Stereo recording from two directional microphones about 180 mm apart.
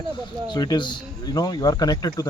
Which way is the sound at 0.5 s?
25° left (ahead or behind).